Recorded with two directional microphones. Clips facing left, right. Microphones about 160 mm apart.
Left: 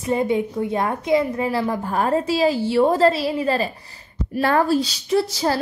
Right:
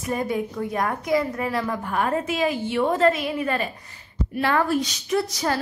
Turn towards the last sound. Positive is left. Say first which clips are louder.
# left 4 dB
turn(degrees=30)  # may be behind; listen again after turning